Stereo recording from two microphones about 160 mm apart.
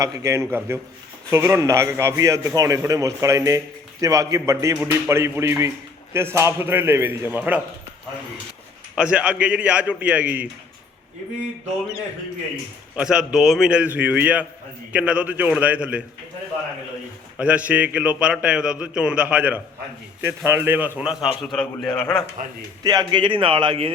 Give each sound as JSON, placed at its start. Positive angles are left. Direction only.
{"t": 0.0, "sound": "a man's voice", "side_deg": -20}
{"t": 9.0, "sound": "a man's voice", "side_deg": -5}
{"t": 13.0, "sound": "a man's voice", "side_deg": -5}
{"t": 17.3, "sound": "a man's voice", "side_deg": -10}
{"t": 22.4, "sound": "a man's voice", "side_deg": -55}
{"t": 22.8, "sound": "a man's voice", "side_deg": -25}